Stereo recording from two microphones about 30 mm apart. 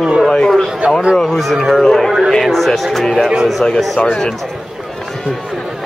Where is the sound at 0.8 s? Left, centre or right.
Right.